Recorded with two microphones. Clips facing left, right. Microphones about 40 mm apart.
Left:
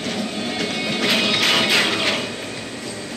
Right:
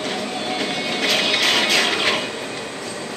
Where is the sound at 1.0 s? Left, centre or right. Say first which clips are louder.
Even; centre.